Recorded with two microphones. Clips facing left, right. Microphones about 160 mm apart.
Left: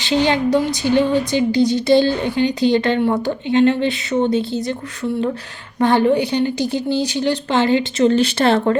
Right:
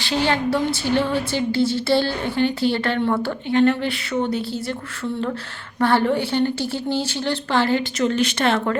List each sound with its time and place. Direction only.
0.0 s speech: 20° left (ahead or behind)
5.8 s a woman's voice: 20° left (ahead or behind)